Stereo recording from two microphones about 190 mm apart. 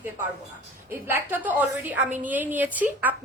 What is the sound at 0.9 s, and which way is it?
A woman's voice, 15° right (ahead or behind).